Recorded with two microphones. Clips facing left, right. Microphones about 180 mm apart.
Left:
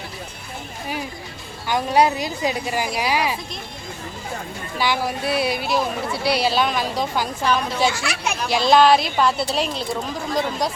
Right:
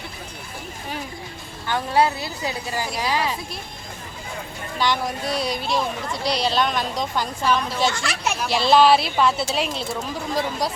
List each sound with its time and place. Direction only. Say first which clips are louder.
1.6 s speech: left 2 dB; 15° left (ahead or behind)
4.8 s speech: left 1 dB; 5° left (ahead or behind)